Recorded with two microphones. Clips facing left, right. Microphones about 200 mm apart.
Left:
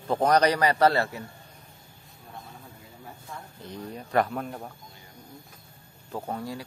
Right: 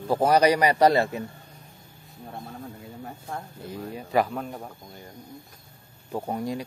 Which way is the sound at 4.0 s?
5° right (ahead or behind).